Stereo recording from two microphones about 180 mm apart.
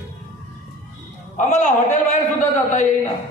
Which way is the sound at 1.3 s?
40° left (ahead or behind).